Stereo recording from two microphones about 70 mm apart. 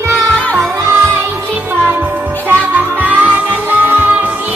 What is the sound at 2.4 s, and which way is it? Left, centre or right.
Music, right.